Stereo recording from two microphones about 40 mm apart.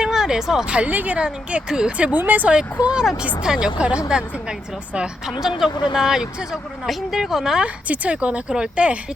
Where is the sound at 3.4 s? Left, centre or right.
Centre.